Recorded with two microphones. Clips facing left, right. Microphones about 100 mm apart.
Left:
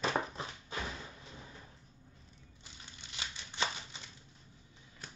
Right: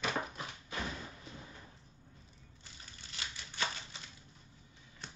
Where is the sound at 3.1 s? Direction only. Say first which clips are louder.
Left 1 dB; 20° left (ahead or behind).